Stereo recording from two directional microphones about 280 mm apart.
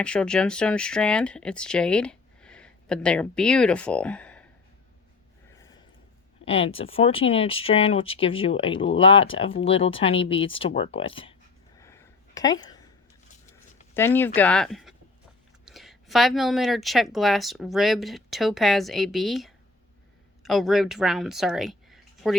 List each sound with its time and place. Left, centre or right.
0.0 s speech: centre
6.4 s speech: left
11.8 s a sound: centre
13.9 s a woman's voice: centre